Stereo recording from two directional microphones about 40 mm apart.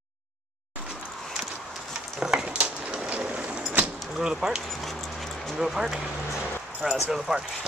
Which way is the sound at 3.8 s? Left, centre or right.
Centre.